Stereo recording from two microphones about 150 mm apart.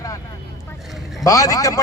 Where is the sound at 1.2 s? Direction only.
25° left (ahead or behind).